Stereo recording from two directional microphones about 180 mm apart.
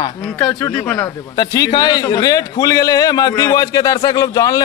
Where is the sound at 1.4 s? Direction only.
20° left (ahead or behind).